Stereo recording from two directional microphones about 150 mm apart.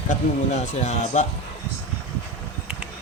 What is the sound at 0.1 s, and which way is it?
A man's voice, 55° left (ahead or behind).